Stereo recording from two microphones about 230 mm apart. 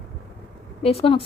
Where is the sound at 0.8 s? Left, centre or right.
Left.